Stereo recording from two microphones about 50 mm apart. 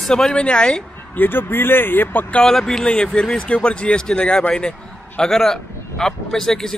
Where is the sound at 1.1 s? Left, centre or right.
Left.